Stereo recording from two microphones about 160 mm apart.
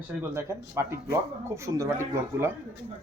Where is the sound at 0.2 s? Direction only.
15° right (ahead or behind).